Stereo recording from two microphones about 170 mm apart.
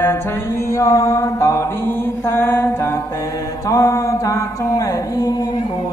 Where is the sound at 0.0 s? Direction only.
15° left (ahead or behind).